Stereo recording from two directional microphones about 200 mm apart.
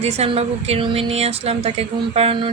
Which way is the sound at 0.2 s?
30° right (ahead or behind).